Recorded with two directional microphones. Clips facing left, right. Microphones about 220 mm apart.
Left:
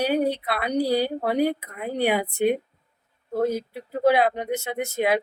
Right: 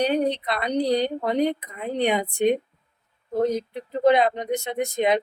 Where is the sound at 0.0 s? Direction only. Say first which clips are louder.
Even; 5° left (ahead or behind).